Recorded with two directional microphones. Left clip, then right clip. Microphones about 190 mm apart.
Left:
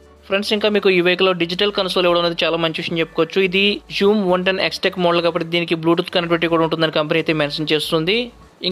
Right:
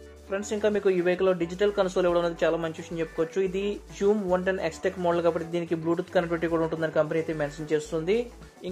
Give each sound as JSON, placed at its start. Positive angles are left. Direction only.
{"t": 0.3, "sound": "speech", "side_deg": 15}